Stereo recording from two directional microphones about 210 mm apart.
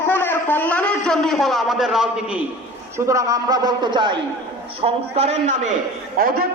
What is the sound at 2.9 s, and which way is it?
A man's voice, 15° right (ahead or behind).